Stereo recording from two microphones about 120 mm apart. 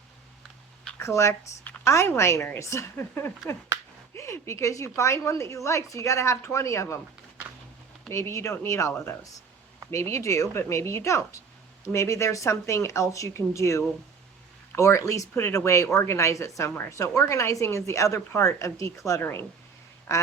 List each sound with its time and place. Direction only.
0.9 s speech: 25° left (ahead or behind)
8.1 s speech: 25° left (ahead or behind)